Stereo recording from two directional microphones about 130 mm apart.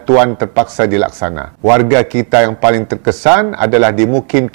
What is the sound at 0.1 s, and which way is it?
Speech, 20° right (ahead or behind).